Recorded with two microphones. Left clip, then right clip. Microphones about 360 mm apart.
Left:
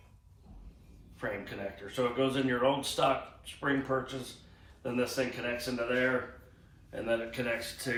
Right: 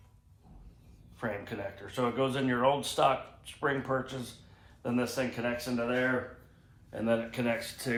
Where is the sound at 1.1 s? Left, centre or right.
Centre.